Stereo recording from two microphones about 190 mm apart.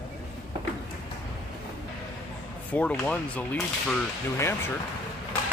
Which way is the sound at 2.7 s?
5° left (ahead or behind).